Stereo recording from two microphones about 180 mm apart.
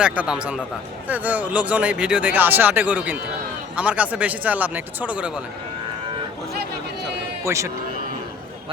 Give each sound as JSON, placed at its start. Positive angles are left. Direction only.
{"t": 0.0, "sound": "a man's voice", "side_deg": -5}
{"t": 6.5, "sound": "a sound", "side_deg": -60}
{"t": 7.4, "sound": "speech", "side_deg": -15}